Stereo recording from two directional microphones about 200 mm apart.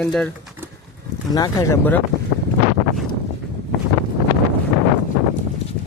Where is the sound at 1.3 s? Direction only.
20° left (ahead or behind).